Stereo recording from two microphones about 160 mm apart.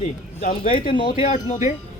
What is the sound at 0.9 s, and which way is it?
Speech, 30° left (ahead or behind).